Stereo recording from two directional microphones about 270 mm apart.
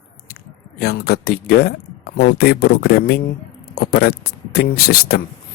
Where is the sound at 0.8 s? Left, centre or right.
Left.